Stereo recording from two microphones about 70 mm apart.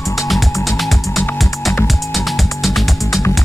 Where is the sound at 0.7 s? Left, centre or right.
Centre.